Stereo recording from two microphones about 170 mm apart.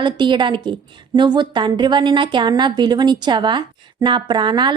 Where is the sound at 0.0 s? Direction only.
25° right (ahead or behind).